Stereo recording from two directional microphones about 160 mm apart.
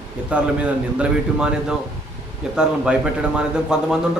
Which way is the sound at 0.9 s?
5° right (ahead or behind).